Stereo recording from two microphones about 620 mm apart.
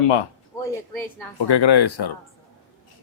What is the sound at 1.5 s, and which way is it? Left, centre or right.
Speech, left.